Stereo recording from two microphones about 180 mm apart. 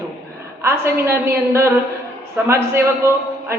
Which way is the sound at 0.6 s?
15° right (ahead or behind).